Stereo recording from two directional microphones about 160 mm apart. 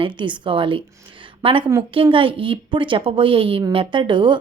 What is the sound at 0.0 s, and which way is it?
A woman's voice, 30° right (ahead or behind).